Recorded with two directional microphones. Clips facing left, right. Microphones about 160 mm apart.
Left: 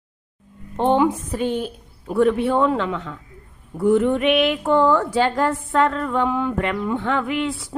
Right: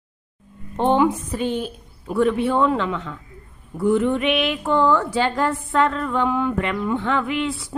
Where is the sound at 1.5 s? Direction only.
50° left (ahead or behind).